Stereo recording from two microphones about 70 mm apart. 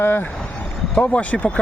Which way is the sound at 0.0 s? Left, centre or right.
Left.